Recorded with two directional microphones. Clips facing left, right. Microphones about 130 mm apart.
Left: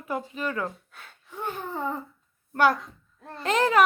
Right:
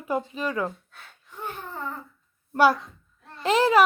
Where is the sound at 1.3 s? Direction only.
15° left (ahead or behind).